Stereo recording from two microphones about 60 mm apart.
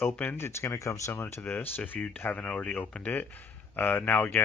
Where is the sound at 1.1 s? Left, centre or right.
Left.